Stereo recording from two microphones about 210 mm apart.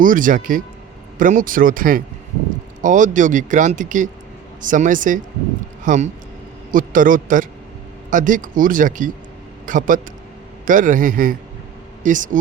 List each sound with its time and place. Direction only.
0.0 s speech: 40° right (ahead or behind)